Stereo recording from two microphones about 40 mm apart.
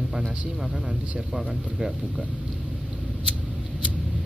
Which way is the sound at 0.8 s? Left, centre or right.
Right.